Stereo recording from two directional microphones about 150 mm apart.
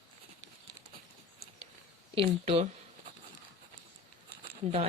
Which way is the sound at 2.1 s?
40° right (ahead or behind).